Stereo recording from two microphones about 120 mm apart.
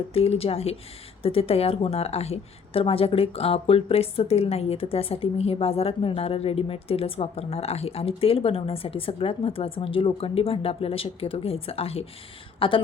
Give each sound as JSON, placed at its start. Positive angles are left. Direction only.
{"t": 0.1, "sound": "a woman's voice", "side_deg": 55}